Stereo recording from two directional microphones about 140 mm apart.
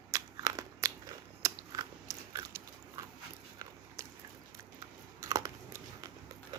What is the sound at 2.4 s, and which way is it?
Dog, 20° right (ahead or behind).